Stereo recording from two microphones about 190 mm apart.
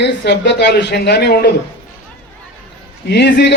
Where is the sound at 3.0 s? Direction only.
60° left (ahead or behind).